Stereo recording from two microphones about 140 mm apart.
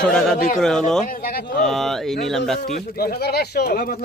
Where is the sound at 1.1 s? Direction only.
90° left.